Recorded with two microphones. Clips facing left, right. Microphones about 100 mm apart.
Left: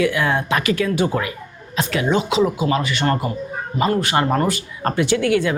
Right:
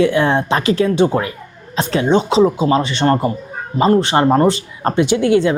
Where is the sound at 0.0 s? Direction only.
30° right (ahead or behind).